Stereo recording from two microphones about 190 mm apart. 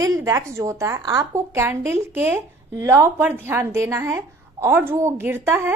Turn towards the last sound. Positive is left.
turn(degrees=-10)  # may be behind; listen again after turning